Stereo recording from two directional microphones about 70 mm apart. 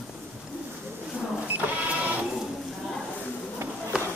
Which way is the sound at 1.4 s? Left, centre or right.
Right.